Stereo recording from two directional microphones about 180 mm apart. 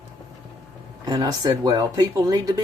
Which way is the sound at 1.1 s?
20° right (ahead or behind).